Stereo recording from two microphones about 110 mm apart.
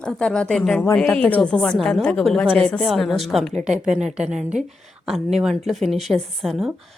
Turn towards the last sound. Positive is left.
turn(degrees=0)  # may be behind; listen again after turning